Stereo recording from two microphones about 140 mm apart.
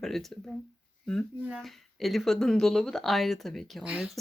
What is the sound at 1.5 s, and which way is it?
Speech, centre (ahead or behind).